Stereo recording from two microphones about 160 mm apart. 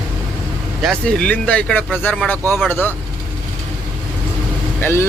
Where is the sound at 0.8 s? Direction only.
5° left (ahead or behind).